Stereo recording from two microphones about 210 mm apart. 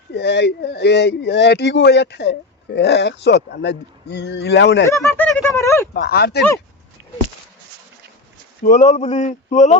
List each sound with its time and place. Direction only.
0.1 s speech: 55° left (ahead or behind)
4.9 s speech: 10° left (ahead or behind)
5.9 s speech: 50° left (ahead or behind)
8.6 s a sound: 35° left (ahead or behind)